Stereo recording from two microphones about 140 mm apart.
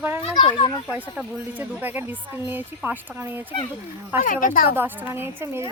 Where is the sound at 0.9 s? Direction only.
10° right (ahead or behind).